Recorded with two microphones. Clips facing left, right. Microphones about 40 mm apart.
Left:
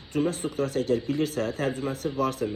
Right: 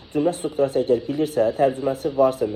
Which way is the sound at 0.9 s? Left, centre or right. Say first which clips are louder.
Right 5 dB; left.